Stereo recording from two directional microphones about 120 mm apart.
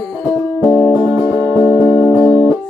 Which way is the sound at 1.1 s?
30° right (ahead or behind).